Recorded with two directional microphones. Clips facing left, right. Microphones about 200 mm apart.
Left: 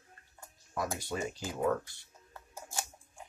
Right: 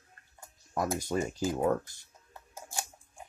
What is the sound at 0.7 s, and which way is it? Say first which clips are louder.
Speech: right 5 dB; 45° right (ahead or behind).